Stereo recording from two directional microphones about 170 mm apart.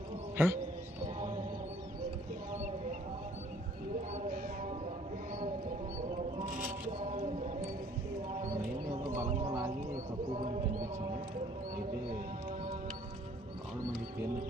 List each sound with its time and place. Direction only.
0.3 s speech: 15° right (ahead or behind)
6.4 s scrape: 50° right (ahead or behind)
6.9 s a sound: 45° right (ahead or behind)
10.3 s clip-clop: 30° right (ahead or behind)